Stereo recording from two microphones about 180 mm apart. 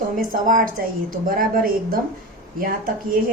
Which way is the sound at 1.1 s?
50° right (ahead or behind).